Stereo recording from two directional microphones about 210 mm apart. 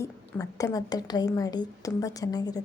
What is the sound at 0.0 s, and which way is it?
A woman's voice, 15° left (ahead or behind).